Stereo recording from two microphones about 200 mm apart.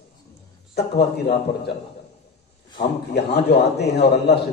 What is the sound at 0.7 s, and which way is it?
Speech, 55° left (ahead or behind).